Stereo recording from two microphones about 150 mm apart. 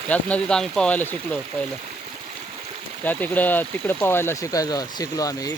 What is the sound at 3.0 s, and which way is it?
Speech, 10° left (ahead or behind).